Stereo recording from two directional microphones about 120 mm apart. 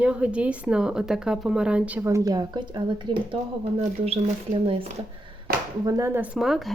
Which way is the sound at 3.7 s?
60° right (ahead or behind).